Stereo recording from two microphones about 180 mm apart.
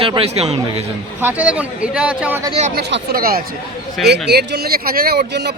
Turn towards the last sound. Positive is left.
turn(degrees=-70)  # may be behind; listen again after turning